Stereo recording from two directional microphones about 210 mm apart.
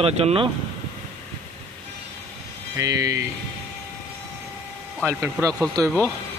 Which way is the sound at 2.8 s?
15° right (ahead or behind).